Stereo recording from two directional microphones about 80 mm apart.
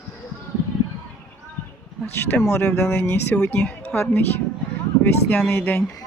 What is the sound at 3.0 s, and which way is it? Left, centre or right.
Speech, left.